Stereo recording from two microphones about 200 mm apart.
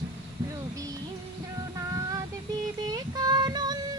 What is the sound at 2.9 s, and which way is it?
Female singing, 20° right (ahead or behind).